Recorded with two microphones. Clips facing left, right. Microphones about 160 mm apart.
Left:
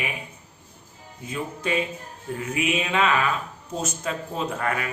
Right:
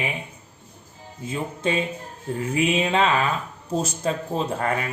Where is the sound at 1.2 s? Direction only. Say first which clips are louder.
Right 3 dB; 25° right (ahead or behind).